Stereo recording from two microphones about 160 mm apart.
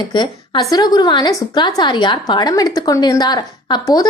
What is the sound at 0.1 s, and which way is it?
A woman's voice, 30° left (ahead or behind).